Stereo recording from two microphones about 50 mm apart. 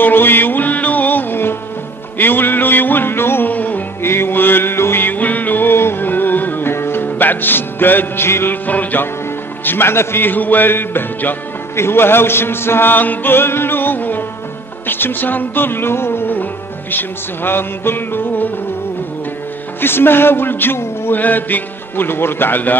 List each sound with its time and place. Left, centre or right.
0.0 s music: left
3.4 s music: left
4.0 s music: left
5.1 s music: left
6.7 s music: left
7.1 s music: left
8.6 s speech: left
9.7 s music: left
11.7 s music: left
19.8 s music: left
21.2 s speech: left